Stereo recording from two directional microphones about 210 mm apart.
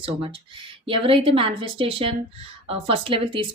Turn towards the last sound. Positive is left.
turn(degrees=-25)  # may be behind; listen again after turning